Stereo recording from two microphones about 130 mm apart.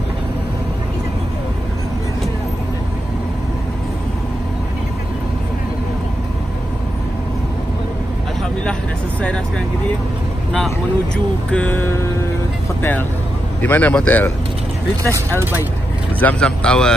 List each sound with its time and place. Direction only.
11.5 s speech: 15° left (ahead or behind)
13.6 s speech: 10° left (ahead or behind)
15.0 s speech: 20° right (ahead or behind)
16.2 s speech: 10° left (ahead or behind)